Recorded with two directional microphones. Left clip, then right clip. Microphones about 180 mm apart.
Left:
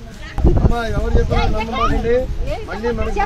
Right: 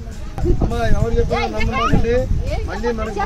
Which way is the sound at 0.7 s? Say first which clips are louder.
Even; 15° left (ahead or behind).